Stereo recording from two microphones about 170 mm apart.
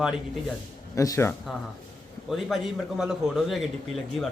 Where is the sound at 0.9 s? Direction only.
20° left (ahead or behind).